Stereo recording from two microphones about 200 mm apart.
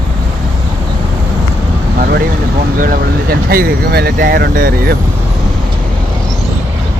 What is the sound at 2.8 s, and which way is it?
Speech, 45° right (ahead or behind).